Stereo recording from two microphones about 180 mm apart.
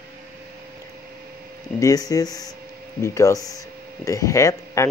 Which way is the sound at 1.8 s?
20° left (ahead or behind).